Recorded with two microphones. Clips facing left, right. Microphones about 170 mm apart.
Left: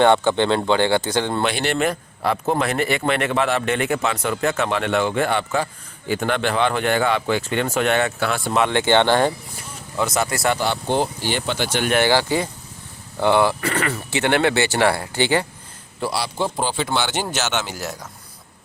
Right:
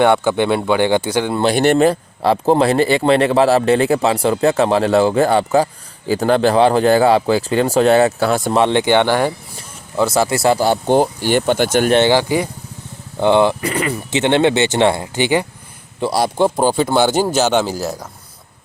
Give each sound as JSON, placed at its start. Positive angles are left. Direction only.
{"t": 0.0, "sound": "speech", "side_deg": -10}
{"t": 1.5, "sound": "speech", "side_deg": -45}
{"t": 1.8, "sound": "a man's voice", "side_deg": -30}
{"t": 8.6, "sound": "speech", "side_deg": -15}
{"t": 10.0, "sound": "speech", "side_deg": -30}
{"t": 11.9, "sound": "speech", "side_deg": -25}
{"t": 16.0, "sound": "a man's voice", "side_deg": -45}